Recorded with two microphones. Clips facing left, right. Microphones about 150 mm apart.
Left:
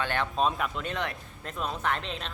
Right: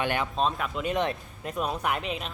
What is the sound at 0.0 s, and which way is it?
Speech, 15° right (ahead or behind).